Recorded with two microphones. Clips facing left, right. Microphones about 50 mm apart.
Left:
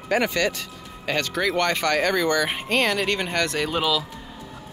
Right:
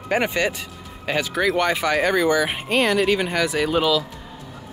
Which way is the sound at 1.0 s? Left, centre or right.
Centre.